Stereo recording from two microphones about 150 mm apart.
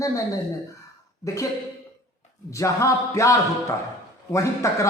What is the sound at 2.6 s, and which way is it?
Speech, 20° left (ahead or behind).